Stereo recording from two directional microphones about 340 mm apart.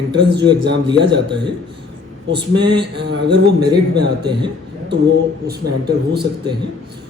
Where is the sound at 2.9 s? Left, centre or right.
Right.